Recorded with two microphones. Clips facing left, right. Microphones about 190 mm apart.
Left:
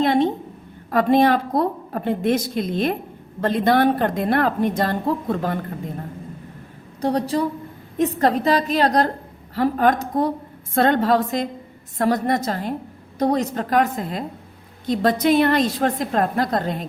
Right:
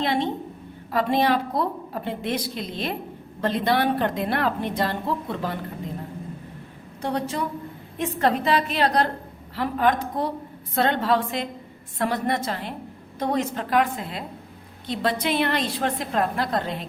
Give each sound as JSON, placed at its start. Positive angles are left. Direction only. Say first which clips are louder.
{"t": 0.0, "sound": "a sound", "louder": "left 6 dB", "side_deg": 45}
{"t": 0.9, "sound": "a woman's voice", "louder": "left 5 dB", "side_deg": 50}
{"t": 7.0, "sound": "a woman's voice", "louder": "left 6 dB", "side_deg": 35}